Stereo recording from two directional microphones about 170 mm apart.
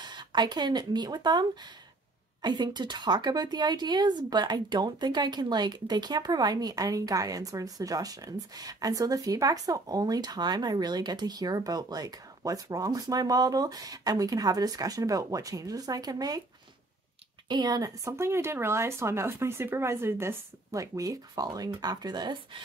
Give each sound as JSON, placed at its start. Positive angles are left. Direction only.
{"t": 0.0, "sound": "a woman's voice", "side_deg": -25}
{"t": 17.5, "sound": "speech", "side_deg": -25}